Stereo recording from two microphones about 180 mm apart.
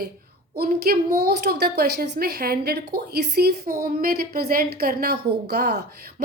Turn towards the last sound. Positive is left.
turn(degrees=-60)  # may be behind; listen again after turning